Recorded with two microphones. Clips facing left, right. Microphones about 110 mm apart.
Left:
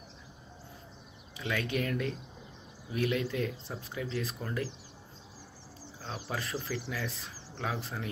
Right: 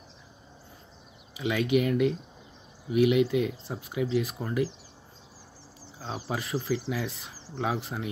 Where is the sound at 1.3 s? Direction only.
15° right (ahead or behind).